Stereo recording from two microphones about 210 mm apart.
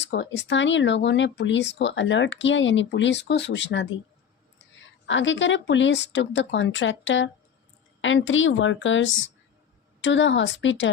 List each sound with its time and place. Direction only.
0.0 s speech: 55° left (ahead or behind)
5.0 s speech: 60° left (ahead or behind)